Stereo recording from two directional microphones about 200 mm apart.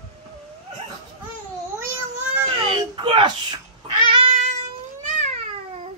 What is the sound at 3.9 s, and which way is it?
Cat, 25° right (ahead or behind).